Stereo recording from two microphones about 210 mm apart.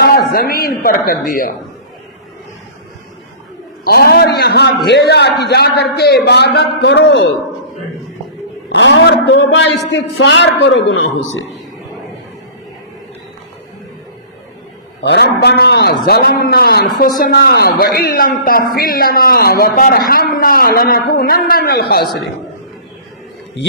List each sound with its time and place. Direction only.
0.0 s speech: 45° left (ahead or behind)
3.8 s a man's voice: 45° left (ahead or behind)
8.7 s a man's voice: 60° left (ahead or behind)
15.0 s a man's voice: 50° left (ahead or behind)